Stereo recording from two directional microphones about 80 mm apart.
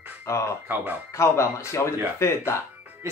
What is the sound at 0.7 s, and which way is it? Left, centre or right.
Speech, right.